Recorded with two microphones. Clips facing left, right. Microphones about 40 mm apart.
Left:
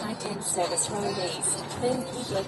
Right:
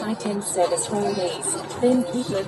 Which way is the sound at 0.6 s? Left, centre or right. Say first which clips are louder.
Right 7 dB; right.